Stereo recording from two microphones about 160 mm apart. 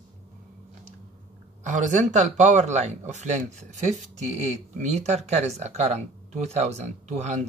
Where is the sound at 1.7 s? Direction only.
50° right (ahead or behind).